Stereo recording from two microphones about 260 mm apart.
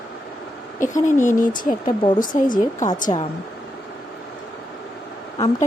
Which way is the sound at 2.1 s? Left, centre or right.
Left.